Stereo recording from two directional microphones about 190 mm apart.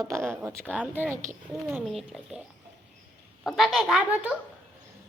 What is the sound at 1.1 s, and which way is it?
Speech, 40° right (ahead or behind).